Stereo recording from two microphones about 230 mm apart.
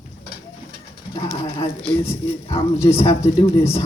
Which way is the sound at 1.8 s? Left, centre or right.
Centre.